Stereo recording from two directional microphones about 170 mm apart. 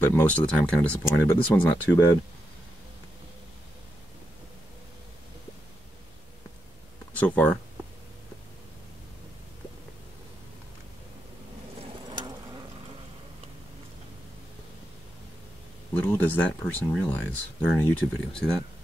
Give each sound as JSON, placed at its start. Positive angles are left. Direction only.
{"t": 0.0, "sound": "speech", "side_deg": 10}
{"t": 7.2, "sound": "speech", "side_deg": 10}
{"t": 11.8, "sound": "bird", "side_deg": -25}
{"t": 15.9, "sound": "speech", "side_deg": 10}